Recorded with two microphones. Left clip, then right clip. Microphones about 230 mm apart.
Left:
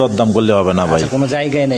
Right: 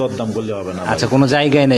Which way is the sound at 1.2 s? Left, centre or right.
Centre.